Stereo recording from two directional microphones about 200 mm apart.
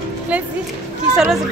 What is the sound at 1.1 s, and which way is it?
Speech, 5° right (ahead or behind).